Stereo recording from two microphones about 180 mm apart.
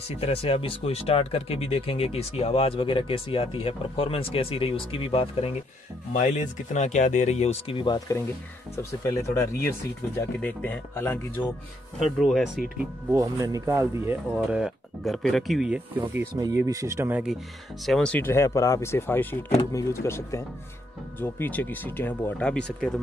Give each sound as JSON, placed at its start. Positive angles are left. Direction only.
{"t": 0.2, "sound": "speech", "side_deg": 30}
{"t": 6.1, "sound": "speech", "side_deg": 40}
{"t": 12.2, "sound": "speech", "side_deg": 0}
{"t": 13.1, "sound": "speech", "side_deg": -15}
{"t": 16.3, "sound": "speech", "side_deg": -20}
{"t": 17.8, "sound": "speech", "side_deg": 5}